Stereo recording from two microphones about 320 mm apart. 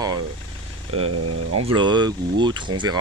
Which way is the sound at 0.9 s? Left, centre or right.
Right.